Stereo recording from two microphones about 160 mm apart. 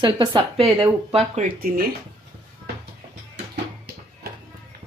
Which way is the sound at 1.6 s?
70° right (ahead or behind).